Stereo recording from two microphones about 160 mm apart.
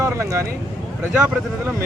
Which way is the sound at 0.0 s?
20° right (ahead or behind).